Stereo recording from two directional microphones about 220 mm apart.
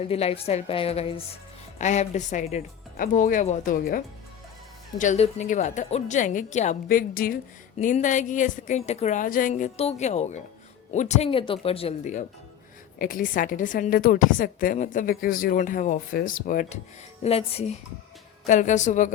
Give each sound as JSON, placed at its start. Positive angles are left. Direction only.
{"t": 0.1, "sound": "a woman's voice", "side_deg": 25}
{"t": 17.2, "sound": "a woman's voice", "side_deg": 25}